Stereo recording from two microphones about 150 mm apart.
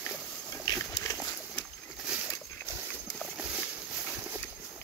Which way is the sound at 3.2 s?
5° right (ahead or behind).